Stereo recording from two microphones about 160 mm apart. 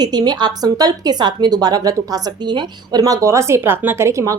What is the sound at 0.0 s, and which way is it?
A woman's voice, 25° right (ahead or behind).